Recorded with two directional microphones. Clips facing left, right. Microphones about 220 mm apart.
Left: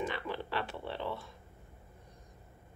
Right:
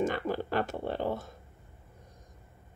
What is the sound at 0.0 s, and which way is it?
Speech, 45° right (ahead or behind).